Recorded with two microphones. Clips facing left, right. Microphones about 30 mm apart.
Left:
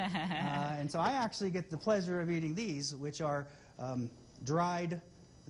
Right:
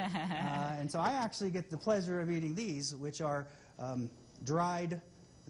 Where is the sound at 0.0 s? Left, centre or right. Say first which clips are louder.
Left 1 dB; centre.